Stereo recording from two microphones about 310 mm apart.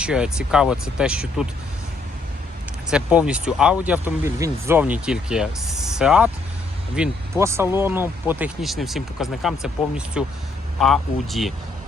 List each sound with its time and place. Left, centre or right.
0.0 s speech: centre
2.9 s speech: centre